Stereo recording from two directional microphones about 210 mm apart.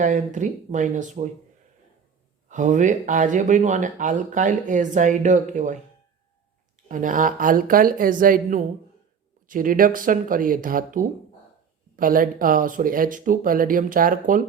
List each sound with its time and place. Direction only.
0.0 s speech: 35° right (ahead or behind)
2.5 s speech: 35° right (ahead or behind)
6.8 s speech: 40° right (ahead or behind)